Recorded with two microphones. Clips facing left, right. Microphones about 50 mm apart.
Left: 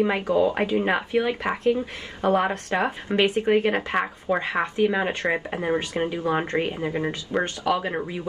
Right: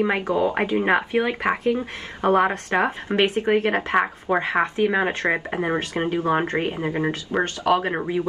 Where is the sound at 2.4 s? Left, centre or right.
Right.